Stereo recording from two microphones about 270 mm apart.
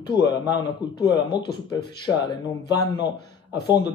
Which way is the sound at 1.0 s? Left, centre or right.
Centre.